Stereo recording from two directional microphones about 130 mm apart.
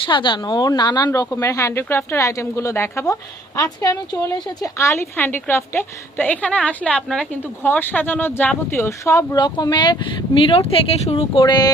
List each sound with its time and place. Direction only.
0.0 s speech: 40° left (ahead or behind); by 9.4 s 25° left (ahead or behind)
9.4 s speech: 35° left (ahead or behind)